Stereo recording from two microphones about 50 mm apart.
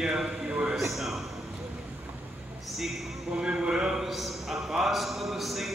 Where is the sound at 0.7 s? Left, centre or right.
Centre.